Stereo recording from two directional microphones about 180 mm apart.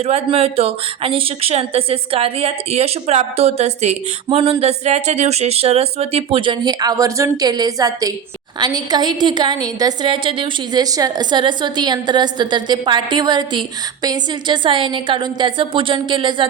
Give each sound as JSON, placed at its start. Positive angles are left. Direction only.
{"t": 0.0, "sound": "a woman's voice", "side_deg": -35}